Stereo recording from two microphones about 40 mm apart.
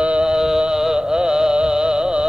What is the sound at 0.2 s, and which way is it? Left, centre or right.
Music, centre.